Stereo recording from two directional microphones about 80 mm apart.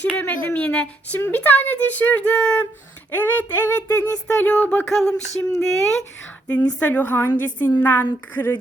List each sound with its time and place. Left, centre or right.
0.0 s speech: left
3.1 s speech: left
4.9 s speech: centre
6.7 s speech: centre